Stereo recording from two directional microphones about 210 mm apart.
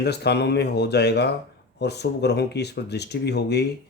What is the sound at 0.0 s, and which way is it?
Speech, 50° left (ahead or behind).